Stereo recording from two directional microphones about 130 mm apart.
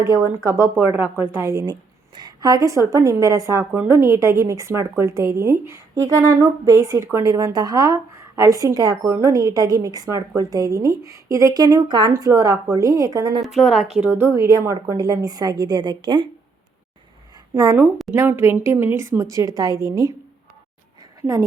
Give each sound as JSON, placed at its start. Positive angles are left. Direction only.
{"t": 0.0, "sound": "speech", "side_deg": -20}
{"t": 13.4, "sound": "a woman's voice", "side_deg": 0}
{"t": 14.1, "sound": "speech", "side_deg": -20}
{"t": 17.5, "sound": "a woman's voice", "side_deg": -30}
{"t": 18.1, "sound": "speech", "side_deg": -15}
{"t": 21.2, "sound": "speech", "side_deg": -25}